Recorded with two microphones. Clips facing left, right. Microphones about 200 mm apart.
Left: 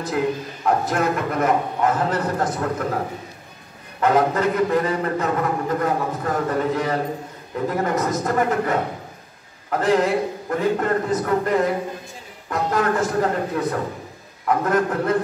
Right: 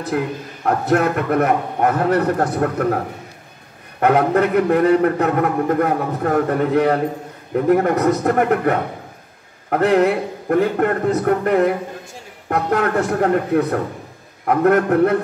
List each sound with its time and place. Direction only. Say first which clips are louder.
0.7 s a man's voice: right 3 dB; 65° right (ahead or behind)
4.0 s a man's voice: right 3 dB; 65° right (ahead or behind)